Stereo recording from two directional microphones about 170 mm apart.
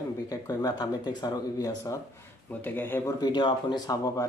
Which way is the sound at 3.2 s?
25° left (ahead or behind).